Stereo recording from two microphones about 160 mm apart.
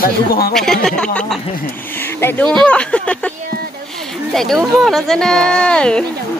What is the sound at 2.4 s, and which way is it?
Speech, 5° left (ahead or behind).